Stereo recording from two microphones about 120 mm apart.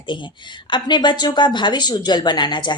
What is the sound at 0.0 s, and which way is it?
Speech, 40° left (ahead or behind).